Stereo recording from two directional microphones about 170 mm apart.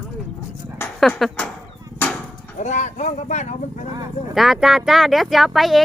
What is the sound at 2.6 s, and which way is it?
Speech, 45° left (ahead or behind).